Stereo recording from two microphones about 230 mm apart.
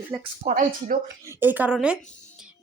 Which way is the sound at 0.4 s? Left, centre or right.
Right.